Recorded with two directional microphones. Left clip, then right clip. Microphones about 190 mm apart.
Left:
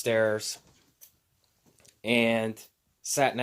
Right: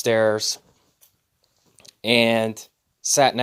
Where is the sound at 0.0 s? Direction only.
30° right (ahead or behind).